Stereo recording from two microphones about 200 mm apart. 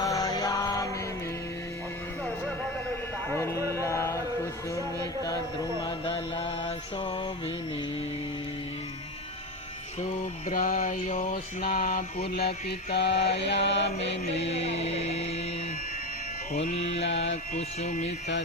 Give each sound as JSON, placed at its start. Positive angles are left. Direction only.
{"t": 0.0, "sound": "music", "side_deg": 15}
{"t": 3.3, "sound": "a sound", "side_deg": 15}
{"t": 3.7, "sound": "mantra", "side_deg": 15}
{"t": 4.9, "sound": "speech", "side_deg": 15}
{"t": 5.8, "sound": "mantra", "side_deg": 25}
{"t": 10.0, "sound": "mantra", "side_deg": 35}
{"t": 12.3, "sound": "mantra", "side_deg": 50}
{"t": 13.9, "sound": "mantra", "side_deg": 30}
{"t": 16.6, "sound": "mantra", "side_deg": 30}